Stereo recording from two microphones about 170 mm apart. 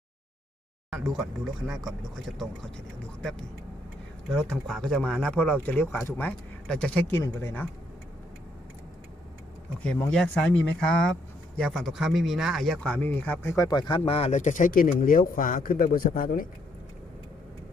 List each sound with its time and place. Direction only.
0.9 s speech: centre (ahead or behind)
4.4 s speech: 5° left (ahead or behind)
9.8 s speech: 5° left (ahead or behind); by 16.5 s 55° left (ahead or behind)